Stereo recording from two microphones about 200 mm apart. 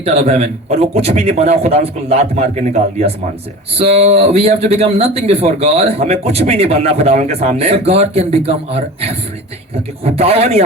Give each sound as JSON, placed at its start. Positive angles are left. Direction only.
{"t": 0.0, "sound": "speech", "side_deg": -30}
{"t": 3.8, "sound": "speech", "side_deg": -30}